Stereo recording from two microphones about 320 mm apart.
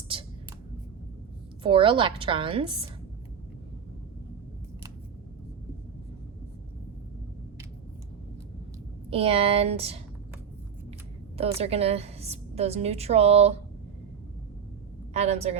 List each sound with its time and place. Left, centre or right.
1.6 s a woman's voice: centre
9.0 s a woman's voice: centre
11.3 s a woman's voice: centre
15.1 s a woman's voice: centre